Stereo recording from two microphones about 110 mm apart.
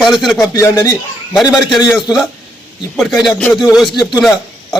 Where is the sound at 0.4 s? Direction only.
30° left (ahead or behind).